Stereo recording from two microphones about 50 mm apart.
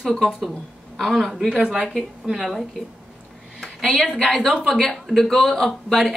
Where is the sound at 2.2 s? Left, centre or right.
Centre.